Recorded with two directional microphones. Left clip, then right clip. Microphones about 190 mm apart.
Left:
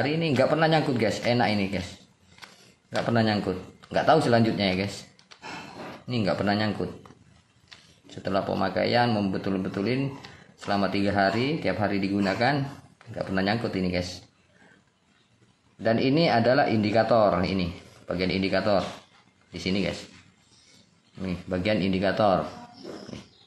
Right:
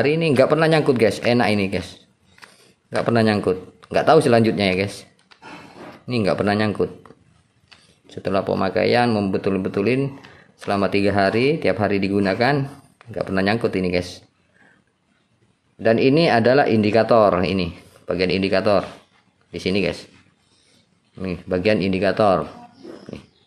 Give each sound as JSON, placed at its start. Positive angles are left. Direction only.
{"t": 0.0, "sound": "speech", "side_deg": -45}
{"t": 6.0, "sound": "speech", "side_deg": -45}
{"t": 8.1, "sound": "speech", "side_deg": -45}
{"t": 15.8, "sound": "speech", "side_deg": -45}
{"t": 21.2, "sound": "speech", "side_deg": -45}